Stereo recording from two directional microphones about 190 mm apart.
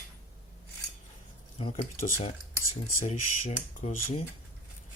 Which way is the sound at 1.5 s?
35° left (ahead or behind).